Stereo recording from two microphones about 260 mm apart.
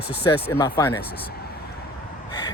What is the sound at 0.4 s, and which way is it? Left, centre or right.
Speech, centre.